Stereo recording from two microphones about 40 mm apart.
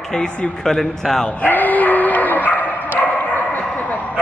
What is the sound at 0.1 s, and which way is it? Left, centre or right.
Speech, centre.